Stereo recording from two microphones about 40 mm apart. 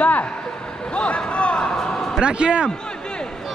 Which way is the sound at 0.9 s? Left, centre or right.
Left.